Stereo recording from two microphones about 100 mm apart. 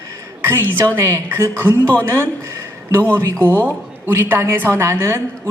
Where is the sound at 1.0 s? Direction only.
25° right (ahead or behind).